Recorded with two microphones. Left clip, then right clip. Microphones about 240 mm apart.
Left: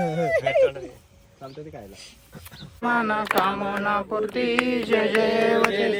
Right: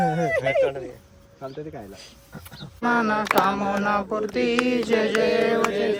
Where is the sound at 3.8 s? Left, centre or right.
Centre.